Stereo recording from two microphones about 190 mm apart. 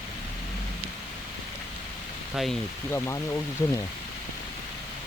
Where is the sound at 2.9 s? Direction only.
15° left (ahead or behind).